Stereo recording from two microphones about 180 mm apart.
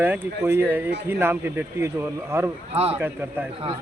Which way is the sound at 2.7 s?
35° right (ahead or behind).